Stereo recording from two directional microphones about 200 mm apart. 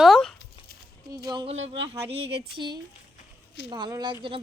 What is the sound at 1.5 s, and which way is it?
Speech, 70° right (ahead or behind).